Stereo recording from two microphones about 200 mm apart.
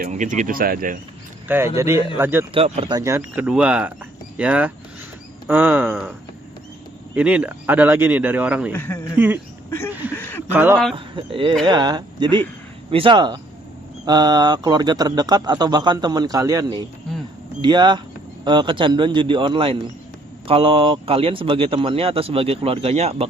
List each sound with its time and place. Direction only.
0.0 s speech: 40° right (ahead or behind)
1.5 s speech: 10° right (ahead or behind)
2.5 s speech: 30° right (ahead or behind)
2.9 s speech: 15° right (ahead or behind)
7.2 s speech: 5° right (ahead or behind)
8.7 s a man's voice: 10° left (ahead or behind)
9.1 s speech: 10° right (ahead or behind)
9.6 s speech: 10° left (ahead or behind)
10.5 s speech: 10° right (ahead or behind)
10.9 s speech: 25° right (ahead or behind)